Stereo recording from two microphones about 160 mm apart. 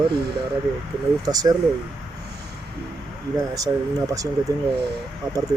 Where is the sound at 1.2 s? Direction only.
25° right (ahead or behind).